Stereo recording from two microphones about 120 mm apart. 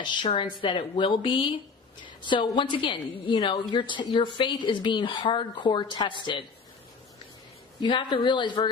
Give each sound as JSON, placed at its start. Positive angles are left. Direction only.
{"t": 0.0, "sound": "a woman's voice", "side_deg": 40}
{"t": 7.8, "sound": "speech", "side_deg": 40}